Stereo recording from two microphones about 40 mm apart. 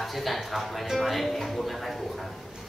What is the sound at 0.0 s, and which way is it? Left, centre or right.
Speech, centre.